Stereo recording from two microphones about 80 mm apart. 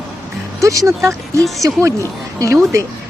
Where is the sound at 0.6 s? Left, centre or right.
Right.